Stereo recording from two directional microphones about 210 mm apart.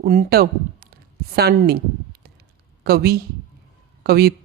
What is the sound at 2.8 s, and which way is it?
Speech, 50° right (ahead or behind).